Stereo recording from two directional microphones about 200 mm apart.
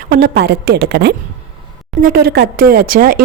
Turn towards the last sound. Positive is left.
turn(degrees=-45)  # may be behind; listen again after turning